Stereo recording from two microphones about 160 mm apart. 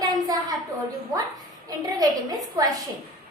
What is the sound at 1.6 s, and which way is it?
A woman's voice, 25° right (ahead or behind).